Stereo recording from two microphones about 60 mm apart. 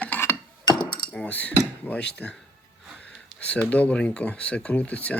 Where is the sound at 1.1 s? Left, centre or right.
Left.